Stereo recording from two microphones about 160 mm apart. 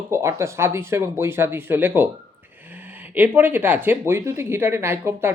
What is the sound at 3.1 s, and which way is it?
Speech, 10° right (ahead or behind).